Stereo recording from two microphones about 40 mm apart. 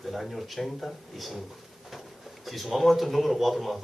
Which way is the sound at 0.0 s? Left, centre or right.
Centre.